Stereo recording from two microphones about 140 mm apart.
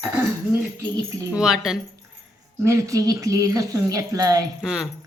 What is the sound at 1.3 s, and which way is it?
Speech, 5° right (ahead or behind).